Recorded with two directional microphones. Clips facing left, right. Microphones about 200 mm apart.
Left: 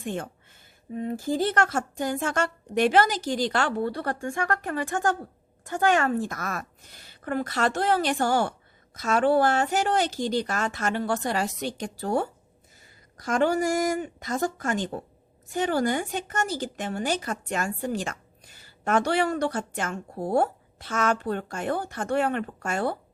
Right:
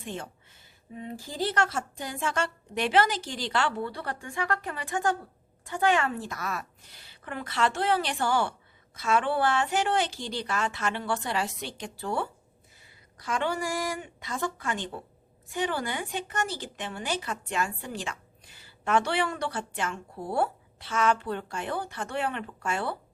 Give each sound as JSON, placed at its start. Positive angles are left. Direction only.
{"t": 0.0, "sound": "speech", "side_deg": 50}